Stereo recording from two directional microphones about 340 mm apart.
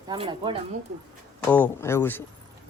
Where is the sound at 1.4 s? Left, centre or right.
Centre.